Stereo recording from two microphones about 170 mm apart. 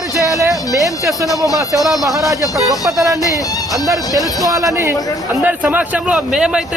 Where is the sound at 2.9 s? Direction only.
20° right (ahead or behind).